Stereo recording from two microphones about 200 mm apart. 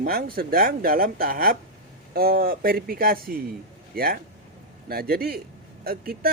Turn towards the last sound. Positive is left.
turn(degrees=-50)  # may be behind; listen again after turning